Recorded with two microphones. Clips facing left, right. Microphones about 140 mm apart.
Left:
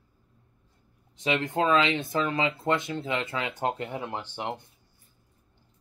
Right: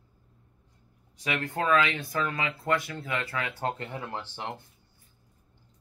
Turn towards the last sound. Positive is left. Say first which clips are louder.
# left 3 dB
turn(degrees=15)  # may be behind; listen again after turning